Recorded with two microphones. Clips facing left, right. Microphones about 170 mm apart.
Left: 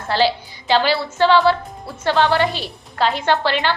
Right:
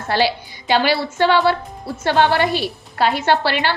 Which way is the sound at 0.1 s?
10° right (ahead or behind).